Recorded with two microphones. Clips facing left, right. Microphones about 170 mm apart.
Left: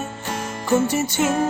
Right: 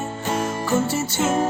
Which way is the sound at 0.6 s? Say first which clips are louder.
Left 6 dB; 15° left (ahead or behind).